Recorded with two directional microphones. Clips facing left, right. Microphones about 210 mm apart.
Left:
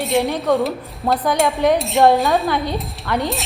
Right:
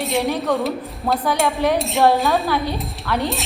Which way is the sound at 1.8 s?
Centre (ahead or behind).